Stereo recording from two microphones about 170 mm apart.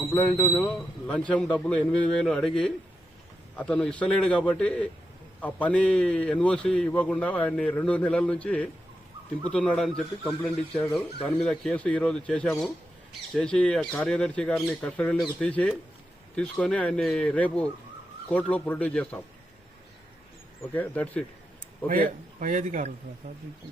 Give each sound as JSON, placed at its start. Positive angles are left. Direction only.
{"t": 0.1, "sound": "a man's voice", "side_deg": 10}
{"t": 20.7, "sound": "a man's voice", "side_deg": 10}
{"t": 21.8, "sound": "a man's voice", "side_deg": -50}